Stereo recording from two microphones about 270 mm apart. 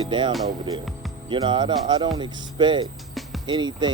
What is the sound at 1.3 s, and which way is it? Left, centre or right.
Speech, centre.